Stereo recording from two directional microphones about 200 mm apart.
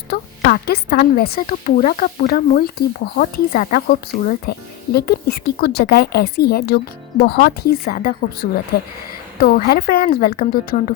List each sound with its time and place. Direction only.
0.1 s speech: 50° left (ahead or behind)